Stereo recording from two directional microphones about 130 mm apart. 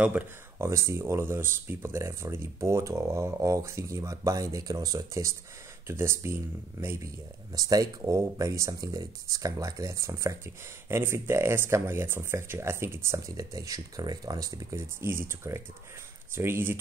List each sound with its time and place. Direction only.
0.0 s speech: 15° right (ahead or behind)